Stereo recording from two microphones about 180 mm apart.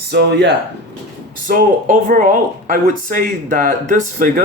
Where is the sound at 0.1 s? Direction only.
70° right (ahead or behind).